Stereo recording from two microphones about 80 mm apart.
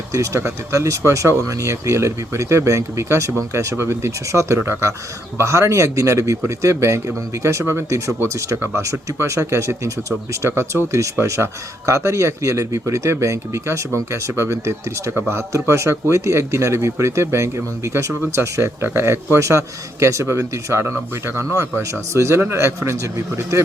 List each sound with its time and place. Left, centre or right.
0.1 s speech: right